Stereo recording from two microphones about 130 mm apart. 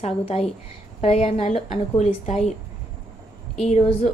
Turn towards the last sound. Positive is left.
turn(degrees=60)  # may be behind; listen again after turning